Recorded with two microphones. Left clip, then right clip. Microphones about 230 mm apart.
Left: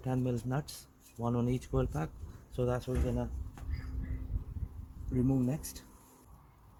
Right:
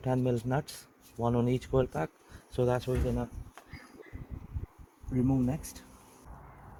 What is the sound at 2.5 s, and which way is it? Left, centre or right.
Speech, right.